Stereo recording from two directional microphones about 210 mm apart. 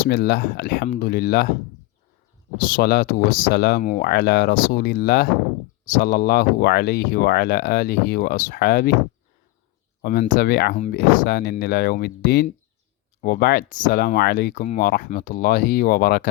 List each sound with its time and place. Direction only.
0.0 s speech: 45° left (ahead or behind)
2.6 s speech: 40° left (ahead or behind)
10.0 s speech: 40° left (ahead or behind)
10.8 s speech: 35° left (ahead or behind)